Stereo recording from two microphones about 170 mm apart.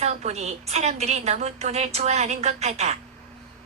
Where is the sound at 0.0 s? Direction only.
40° right (ahead or behind).